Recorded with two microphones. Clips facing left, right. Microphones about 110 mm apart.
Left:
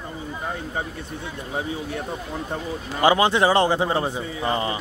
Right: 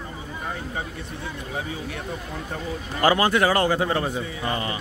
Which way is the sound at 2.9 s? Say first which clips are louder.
Left 2 dB; 20° left (ahead or behind).